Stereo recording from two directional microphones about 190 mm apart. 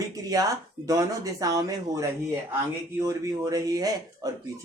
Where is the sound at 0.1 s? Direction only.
20° right (ahead or behind).